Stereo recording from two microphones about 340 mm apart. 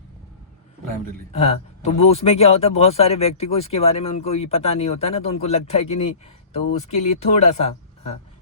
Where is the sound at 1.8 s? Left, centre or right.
Centre.